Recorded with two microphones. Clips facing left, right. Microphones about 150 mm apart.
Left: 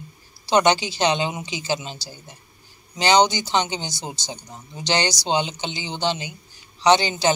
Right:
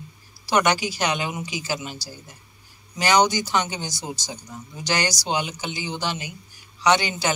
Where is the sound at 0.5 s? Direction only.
25° left (ahead or behind).